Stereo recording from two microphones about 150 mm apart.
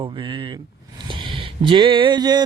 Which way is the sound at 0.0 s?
35° right (ahead or behind).